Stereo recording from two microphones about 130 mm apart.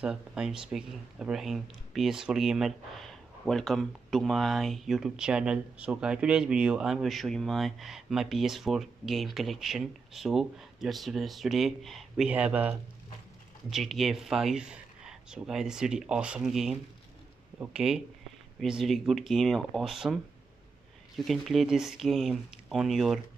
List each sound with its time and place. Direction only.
0.0 s speech: 5° right (ahead or behind)
21.2 s speech: centre (ahead or behind)